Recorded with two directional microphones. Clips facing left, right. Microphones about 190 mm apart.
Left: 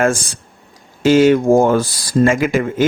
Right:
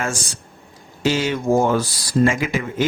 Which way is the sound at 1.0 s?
50° left (ahead or behind).